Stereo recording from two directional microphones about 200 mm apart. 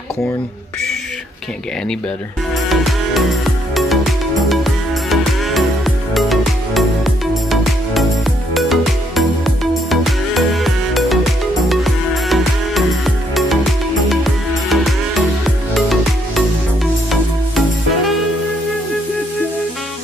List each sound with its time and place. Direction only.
2.7 s music: centre (ahead or behind)
8.5 s music: centre (ahead or behind)